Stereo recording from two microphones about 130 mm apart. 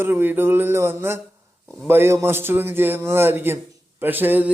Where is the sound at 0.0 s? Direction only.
15° right (ahead or behind).